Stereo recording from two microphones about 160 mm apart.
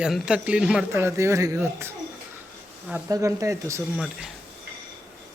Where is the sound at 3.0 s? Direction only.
20° right (ahead or behind).